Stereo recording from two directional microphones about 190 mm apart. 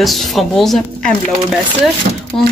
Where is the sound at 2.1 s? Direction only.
45° right (ahead or behind).